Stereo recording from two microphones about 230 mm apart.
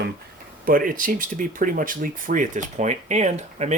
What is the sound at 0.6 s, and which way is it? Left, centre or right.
Speech, right.